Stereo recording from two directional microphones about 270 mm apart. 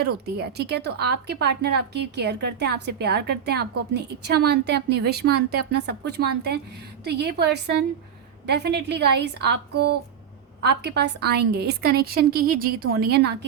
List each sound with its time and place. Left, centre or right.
0.0 s a woman's voice: right